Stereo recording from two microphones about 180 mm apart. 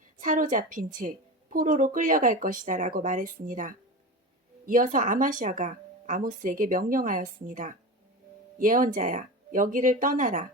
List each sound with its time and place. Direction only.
0.2 s a woman's voice: 45° right (ahead or behind)